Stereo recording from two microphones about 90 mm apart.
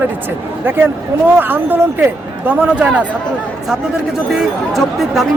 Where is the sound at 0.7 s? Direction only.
25° right (ahead or behind).